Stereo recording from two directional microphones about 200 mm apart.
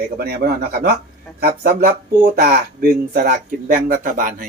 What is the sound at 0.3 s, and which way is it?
Speech, 50° right (ahead or behind).